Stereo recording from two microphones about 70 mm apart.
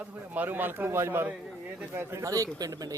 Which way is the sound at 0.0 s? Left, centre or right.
Right.